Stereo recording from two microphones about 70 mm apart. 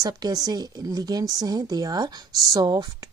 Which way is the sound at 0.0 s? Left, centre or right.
Right.